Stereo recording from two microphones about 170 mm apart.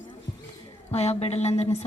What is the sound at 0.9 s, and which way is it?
Speech, 40° left (ahead or behind).